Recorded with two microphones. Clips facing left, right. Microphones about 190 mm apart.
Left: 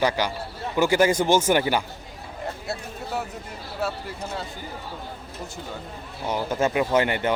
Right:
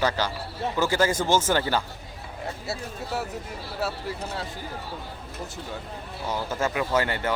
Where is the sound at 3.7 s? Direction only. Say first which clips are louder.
Left 1 dB; centre (ahead or behind).